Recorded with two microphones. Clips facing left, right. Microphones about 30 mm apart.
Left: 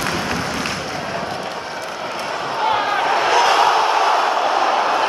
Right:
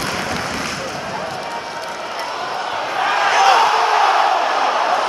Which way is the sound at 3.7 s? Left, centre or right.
Centre.